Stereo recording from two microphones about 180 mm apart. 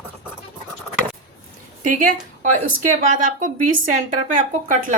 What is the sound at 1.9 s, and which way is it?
A woman's voice, 45° right (ahead or behind).